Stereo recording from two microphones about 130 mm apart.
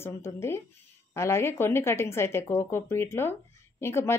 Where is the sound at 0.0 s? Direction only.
20° left (ahead or behind).